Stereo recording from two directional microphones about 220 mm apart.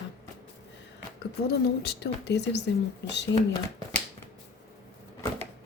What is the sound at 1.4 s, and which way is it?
A woman's voice, 50° left (ahead or behind).